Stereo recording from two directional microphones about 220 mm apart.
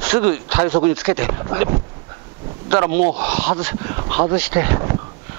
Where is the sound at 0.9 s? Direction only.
10° right (ahead or behind).